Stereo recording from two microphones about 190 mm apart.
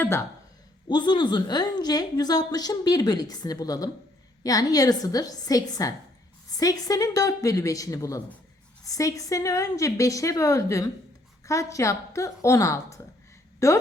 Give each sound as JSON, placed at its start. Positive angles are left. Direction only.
{"t": 0.0, "sound": "a woman's voice", "side_deg": 10}
{"t": 0.9, "sound": "a woman's voice", "side_deg": 25}